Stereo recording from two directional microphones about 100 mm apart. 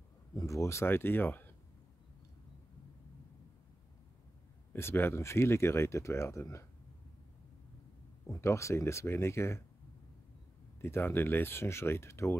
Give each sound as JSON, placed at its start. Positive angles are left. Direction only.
{"t": 0.4, "sound": "speech", "side_deg": 30}
{"t": 4.7, "sound": "speech", "side_deg": 25}
{"t": 8.3, "sound": "speech", "side_deg": 30}
{"t": 10.8, "sound": "speech", "side_deg": 25}